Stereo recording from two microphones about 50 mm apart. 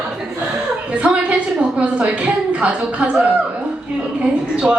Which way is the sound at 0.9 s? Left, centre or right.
Right.